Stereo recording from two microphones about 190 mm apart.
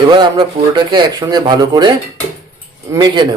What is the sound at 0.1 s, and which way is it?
Speech, 25° right (ahead or behind).